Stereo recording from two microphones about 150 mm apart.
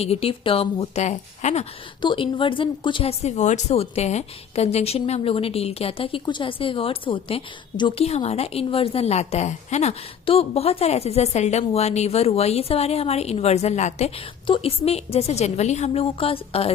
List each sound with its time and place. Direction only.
0.0 s a woman's voice: 40° left (ahead or behind)
2.0 s speech: 35° left (ahead or behind)
14.4 s a woman's voice: 35° left (ahead or behind)